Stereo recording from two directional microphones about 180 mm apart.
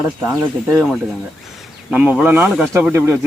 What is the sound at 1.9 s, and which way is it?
Speech, 10° right (ahead or behind).